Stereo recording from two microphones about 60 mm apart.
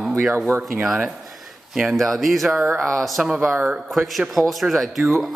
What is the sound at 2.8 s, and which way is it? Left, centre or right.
Speech, centre.